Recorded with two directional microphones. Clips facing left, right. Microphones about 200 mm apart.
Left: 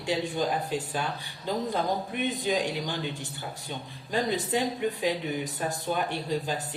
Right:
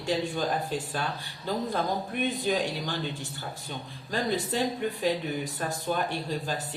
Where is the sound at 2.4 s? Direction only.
15° left (ahead or behind).